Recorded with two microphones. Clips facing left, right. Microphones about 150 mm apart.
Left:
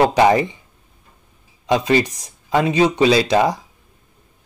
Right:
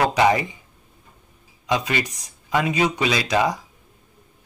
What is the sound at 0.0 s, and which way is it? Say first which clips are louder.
Speech: left 5 dB; 30° left (ahead or behind).